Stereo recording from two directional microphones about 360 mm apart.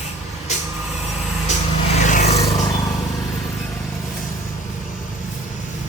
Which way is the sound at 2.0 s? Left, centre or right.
Centre.